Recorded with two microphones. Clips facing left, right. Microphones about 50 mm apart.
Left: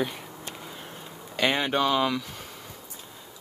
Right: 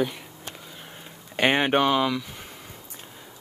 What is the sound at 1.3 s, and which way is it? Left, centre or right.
Speech, right.